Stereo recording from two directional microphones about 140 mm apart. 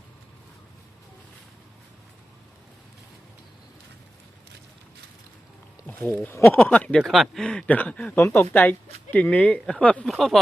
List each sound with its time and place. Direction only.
5.8 s speech: 15° left (ahead or behind)